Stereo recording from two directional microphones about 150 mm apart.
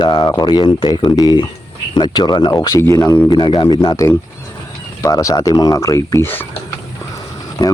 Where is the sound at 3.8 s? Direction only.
25° left (ahead or behind).